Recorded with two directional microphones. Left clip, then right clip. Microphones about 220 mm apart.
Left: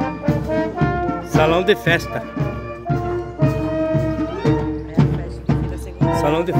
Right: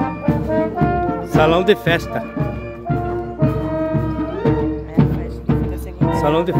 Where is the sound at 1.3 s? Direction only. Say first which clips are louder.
Right 2 dB; centre (ahead or behind).